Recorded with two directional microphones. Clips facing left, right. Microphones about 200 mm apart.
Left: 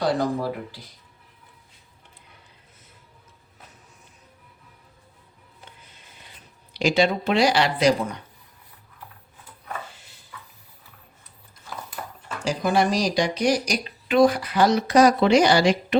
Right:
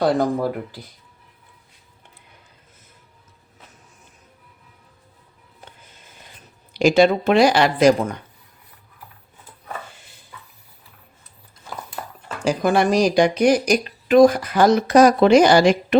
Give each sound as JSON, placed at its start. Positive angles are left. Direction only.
{"t": 0.0, "sound": "speech", "side_deg": -50}
{"t": 5.8, "sound": "a sound", "side_deg": -45}
{"t": 12.5, "sound": "speech", "side_deg": -55}